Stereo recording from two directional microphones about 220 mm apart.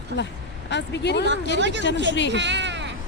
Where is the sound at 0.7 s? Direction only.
50° left (ahead or behind).